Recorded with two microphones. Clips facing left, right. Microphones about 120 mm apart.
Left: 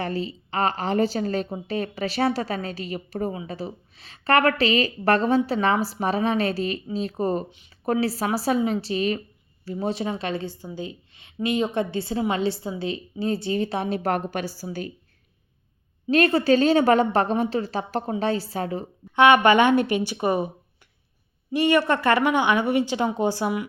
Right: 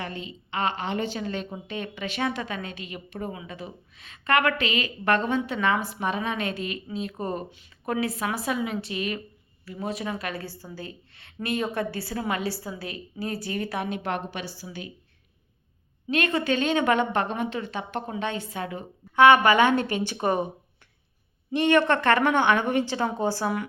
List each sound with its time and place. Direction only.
0.0 s a woman's voice: 35° left (ahead or behind)
16.0 s a woman's voice: 35° left (ahead or behind)
19.1 s a woman's voice: 20° left (ahead or behind)
21.5 s a woman's voice: 10° left (ahead or behind)